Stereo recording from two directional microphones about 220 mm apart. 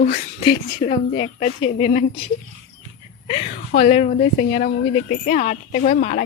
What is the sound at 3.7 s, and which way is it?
A woman's voice, 35° left (ahead or behind).